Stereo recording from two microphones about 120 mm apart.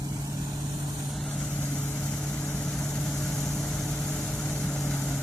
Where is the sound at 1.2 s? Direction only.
5° left (ahead or behind).